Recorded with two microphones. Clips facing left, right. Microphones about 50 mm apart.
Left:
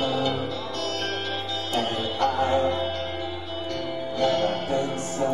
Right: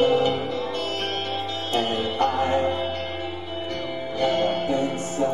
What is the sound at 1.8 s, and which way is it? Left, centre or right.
Music, right.